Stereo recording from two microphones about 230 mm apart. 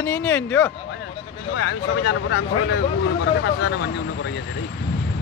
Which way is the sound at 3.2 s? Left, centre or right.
Left.